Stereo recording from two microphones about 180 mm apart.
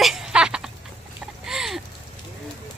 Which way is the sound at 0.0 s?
5° right (ahead or behind).